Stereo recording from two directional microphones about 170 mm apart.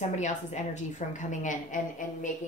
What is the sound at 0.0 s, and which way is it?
A woman's voice, 45° left (ahead or behind).